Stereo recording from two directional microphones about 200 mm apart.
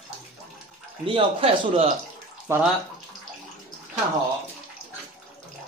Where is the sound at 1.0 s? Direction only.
25° right (ahead or behind).